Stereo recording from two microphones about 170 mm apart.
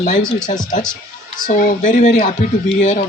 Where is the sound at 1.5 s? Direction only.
50° left (ahead or behind).